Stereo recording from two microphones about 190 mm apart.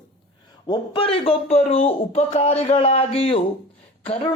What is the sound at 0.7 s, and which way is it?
Speech, 30° left (ahead or behind).